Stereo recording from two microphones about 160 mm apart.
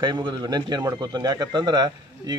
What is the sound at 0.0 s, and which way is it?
A man's voice, 25° right (ahead or behind).